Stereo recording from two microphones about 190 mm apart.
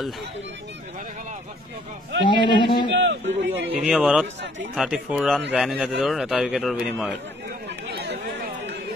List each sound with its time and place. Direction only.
2.2 s speech: 25° left (ahead or behind)
2.9 s a man's voice: 70° right (ahead or behind)
3.8 s a man's voice: 5° right (ahead or behind)